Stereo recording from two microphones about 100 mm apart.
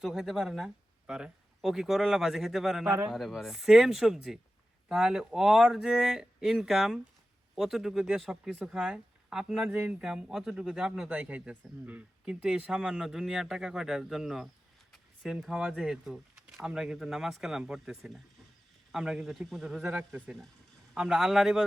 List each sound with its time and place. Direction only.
0.0 s speech: 5° right (ahead or behind)